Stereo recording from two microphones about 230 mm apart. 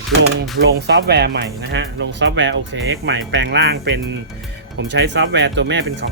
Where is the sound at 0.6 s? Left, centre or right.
Right.